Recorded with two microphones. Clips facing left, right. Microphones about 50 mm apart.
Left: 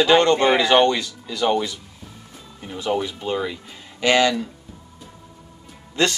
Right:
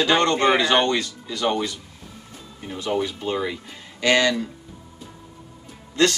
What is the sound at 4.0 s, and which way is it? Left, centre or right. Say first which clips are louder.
Speech: left 1 dB; left.